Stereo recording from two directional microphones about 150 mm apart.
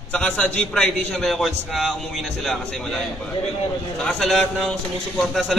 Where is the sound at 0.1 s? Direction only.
5° left (ahead or behind).